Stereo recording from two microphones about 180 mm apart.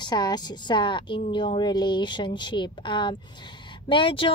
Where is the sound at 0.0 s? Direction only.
25° left (ahead or behind).